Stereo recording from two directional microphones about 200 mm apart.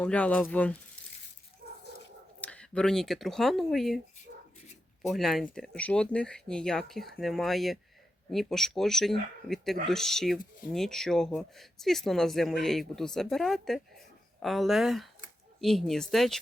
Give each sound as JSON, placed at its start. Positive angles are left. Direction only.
{"t": 0.0, "sound": "speech", "side_deg": 5}
{"t": 1.6, "sound": "dog", "side_deg": -45}
{"t": 2.4, "sound": "speech", "side_deg": 5}
{"t": 4.3, "sound": "dog", "side_deg": -55}
{"t": 5.0, "sound": "speech", "side_deg": 0}